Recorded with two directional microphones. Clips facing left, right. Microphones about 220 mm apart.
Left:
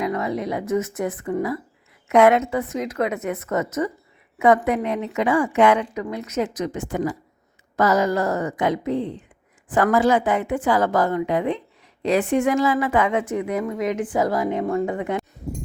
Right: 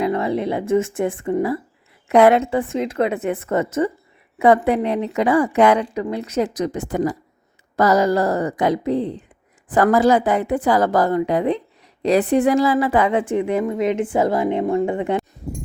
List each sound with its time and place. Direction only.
0.0 s a woman's voice: 30° right (ahead or behind)